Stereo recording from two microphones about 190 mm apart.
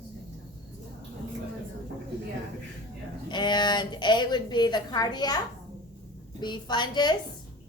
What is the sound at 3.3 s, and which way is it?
A woman's voice, 25° left (ahead or behind).